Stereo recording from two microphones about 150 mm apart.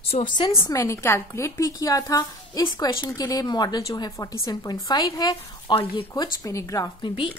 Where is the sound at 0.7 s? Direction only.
20° left (ahead or behind).